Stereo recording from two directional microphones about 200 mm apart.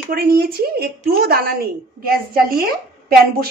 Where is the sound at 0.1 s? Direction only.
50° right (ahead or behind).